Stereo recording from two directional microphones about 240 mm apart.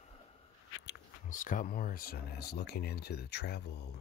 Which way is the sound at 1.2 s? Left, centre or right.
Left.